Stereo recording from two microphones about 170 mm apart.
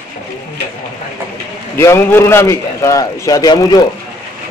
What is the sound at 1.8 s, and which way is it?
A man's voice, 15° left (ahead or behind).